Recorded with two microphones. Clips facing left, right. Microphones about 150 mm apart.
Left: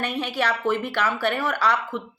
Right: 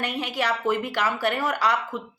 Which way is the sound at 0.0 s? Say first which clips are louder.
Left 2 dB; 15° right (ahead or behind).